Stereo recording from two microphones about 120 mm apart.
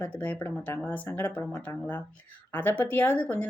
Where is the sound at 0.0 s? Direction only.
15° left (ahead or behind).